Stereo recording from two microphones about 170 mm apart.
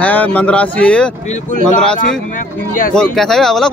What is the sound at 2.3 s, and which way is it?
Speech, 50° left (ahead or behind).